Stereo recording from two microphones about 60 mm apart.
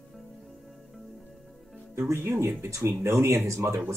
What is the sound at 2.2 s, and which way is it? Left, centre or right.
Speech, right.